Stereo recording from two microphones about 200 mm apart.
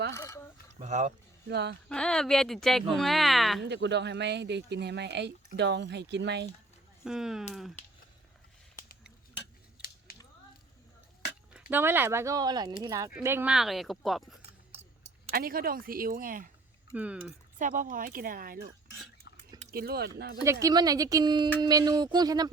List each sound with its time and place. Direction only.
0.1 s a sound: 15° left (ahead or behind)
0.8 s speech: 35° right (ahead or behind)
1.5 s speech: 55° right (ahead or behind)
1.9 s speech: 5° left (ahead or behind)
3.6 s speech: 60° right (ahead or behind)
7.0 s speech: centre (ahead or behind)
9.8 s scissors: 5° right (ahead or behind)
11.7 s speech: 10° right (ahead or behind)
15.3 s speech: 45° right (ahead or behind)
16.9 s speech: 5° right (ahead or behind)
17.6 s speech: 40° right (ahead or behind)
19.7 s speech: 50° right (ahead or behind)
20.4 s speech: 15° right (ahead or behind)